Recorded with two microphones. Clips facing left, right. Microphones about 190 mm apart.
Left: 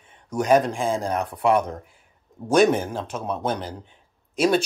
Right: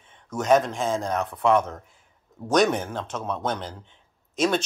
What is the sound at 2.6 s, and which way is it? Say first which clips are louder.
Speech: left 6 dB; 30° left (ahead or behind).